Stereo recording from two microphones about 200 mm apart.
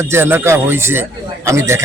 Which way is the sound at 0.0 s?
10° right (ahead or behind).